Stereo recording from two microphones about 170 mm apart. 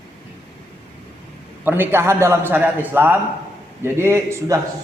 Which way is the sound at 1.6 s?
10° right (ahead or behind).